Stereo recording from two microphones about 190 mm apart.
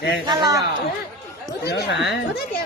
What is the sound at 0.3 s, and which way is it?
Speech, 20° right (ahead or behind).